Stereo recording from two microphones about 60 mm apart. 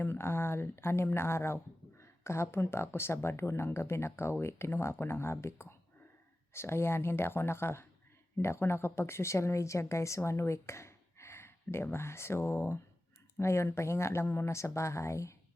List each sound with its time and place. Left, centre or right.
0.0 s a woman's voice: left